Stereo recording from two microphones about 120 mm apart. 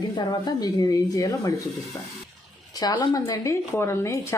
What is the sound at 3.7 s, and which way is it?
Dishes, 20° left (ahead or behind).